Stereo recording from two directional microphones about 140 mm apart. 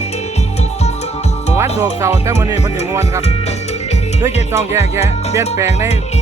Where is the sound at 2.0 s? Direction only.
20° right (ahead or behind).